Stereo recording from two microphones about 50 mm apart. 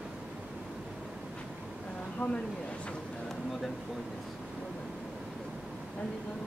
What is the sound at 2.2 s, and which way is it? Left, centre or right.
Speech, left.